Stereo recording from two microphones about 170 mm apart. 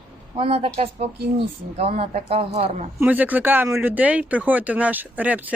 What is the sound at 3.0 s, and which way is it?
Speech, 10° right (ahead or behind).